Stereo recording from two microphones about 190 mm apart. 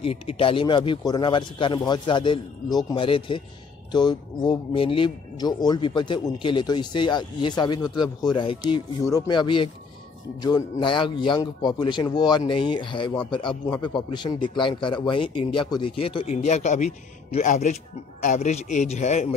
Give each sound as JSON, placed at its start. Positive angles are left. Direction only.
{"t": 0.0, "sound": "a man's voice", "side_deg": 30}